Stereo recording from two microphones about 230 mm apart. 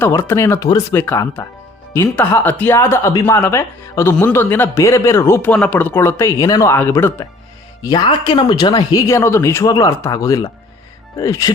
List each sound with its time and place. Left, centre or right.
0.0 s speech: centre